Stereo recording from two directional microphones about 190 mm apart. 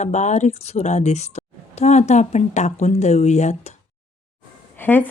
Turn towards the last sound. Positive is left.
turn(degrees=10)  # may be behind; listen again after turning